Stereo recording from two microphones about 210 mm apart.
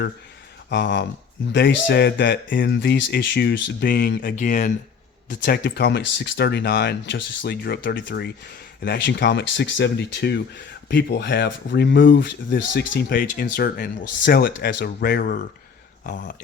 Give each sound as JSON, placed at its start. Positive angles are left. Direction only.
{"t": 0.7, "sound": "speech", "side_deg": 60}
{"t": 5.4, "sound": "speech", "side_deg": 50}